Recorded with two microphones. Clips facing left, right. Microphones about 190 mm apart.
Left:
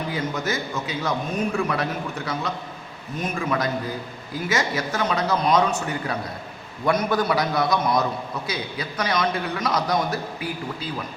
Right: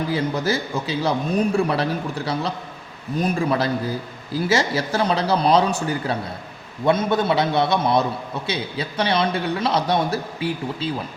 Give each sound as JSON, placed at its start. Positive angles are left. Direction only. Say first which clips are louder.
{"t": 0.1, "sound": "a man's voice", "louder": "right 4 dB", "side_deg": -30}